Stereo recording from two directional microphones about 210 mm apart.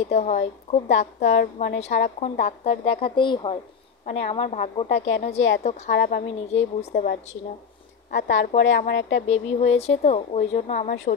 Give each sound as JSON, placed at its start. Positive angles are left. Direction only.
{"t": 0.1, "sound": "a woman's voice", "side_deg": 30}
{"t": 8.3, "sound": "a woman's voice", "side_deg": 60}
{"t": 9.3, "sound": "a woman's voice", "side_deg": 30}